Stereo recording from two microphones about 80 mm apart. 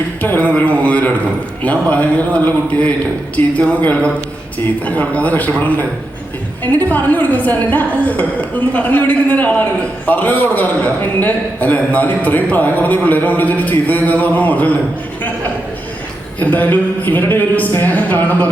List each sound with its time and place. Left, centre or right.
0.2 s a sound: centre
1.6 s a man's voice: centre
16.4 s a man's voice: centre